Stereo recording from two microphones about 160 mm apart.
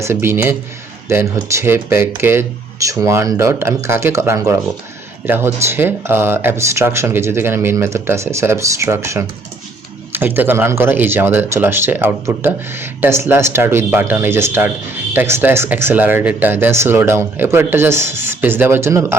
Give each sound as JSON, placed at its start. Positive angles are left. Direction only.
{"t": 0.0, "sound": "speech", "side_deg": -15}